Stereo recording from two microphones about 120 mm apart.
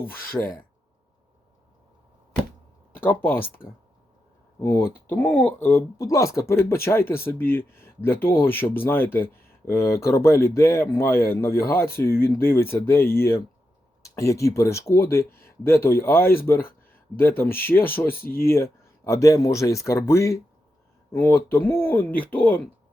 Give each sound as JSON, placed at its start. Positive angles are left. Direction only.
{"t": 0.0, "sound": "speech", "side_deg": 20}
{"t": 2.9, "sound": "speech", "side_deg": 15}
{"t": 4.6, "sound": "speech", "side_deg": 15}
{"t": 6.0, "sound": "speech", "side_deg": 25}